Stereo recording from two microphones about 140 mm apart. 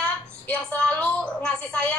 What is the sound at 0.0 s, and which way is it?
A woman's voice, 5° left (ahead or behind).